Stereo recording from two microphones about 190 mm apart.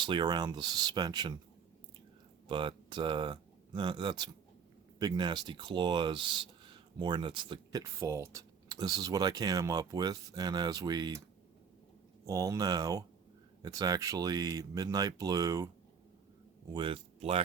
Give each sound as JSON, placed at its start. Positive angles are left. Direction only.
{"t": 0.0, "sound": "speech", "side_deg": -25}
{"t": 2.5, "sound": "speech", "side_deg": -25}
{"t": 12.2, "sound": "speech", "side_deg": -15}
{"t": 16.7, "sound": "speech", "side_deg": -30}